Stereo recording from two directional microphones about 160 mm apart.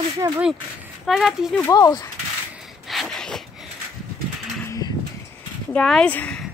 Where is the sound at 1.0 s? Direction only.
Centre (ahead or behind).